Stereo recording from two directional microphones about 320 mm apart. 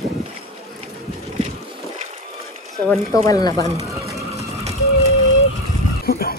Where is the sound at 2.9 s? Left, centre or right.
Centre.